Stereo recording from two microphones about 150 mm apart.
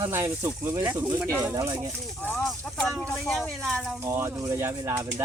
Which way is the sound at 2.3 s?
5° left (ahead or behind).